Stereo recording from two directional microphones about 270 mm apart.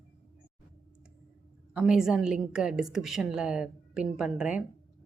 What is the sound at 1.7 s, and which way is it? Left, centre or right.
A woman's voice, centre.